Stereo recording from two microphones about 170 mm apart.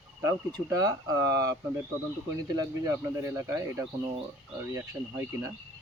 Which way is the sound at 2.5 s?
20° right (ahead or behind).